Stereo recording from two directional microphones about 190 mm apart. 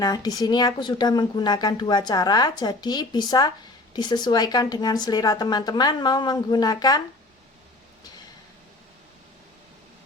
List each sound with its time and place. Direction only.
0.0 s speech: 20° left (ahead or behind)